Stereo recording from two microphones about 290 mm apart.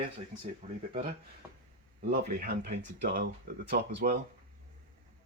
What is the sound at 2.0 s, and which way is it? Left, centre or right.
Speech, right.